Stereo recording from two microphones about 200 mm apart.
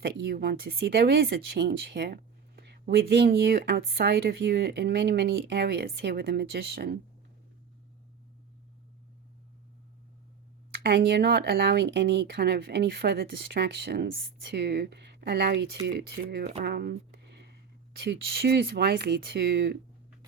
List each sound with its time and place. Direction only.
0.0 s speech: 55° right (ahead or behind)
10.8 s speech: 55° right (ahead or behind)
18.0 s speech: 55° right (ahead or behind)